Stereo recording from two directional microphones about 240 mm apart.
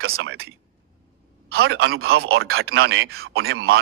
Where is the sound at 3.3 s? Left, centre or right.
Right.